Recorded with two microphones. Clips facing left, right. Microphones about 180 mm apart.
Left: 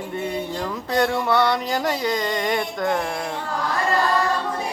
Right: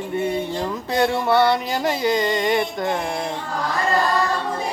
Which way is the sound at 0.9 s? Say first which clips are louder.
Right 1 dB; 5° right (ahead or behind).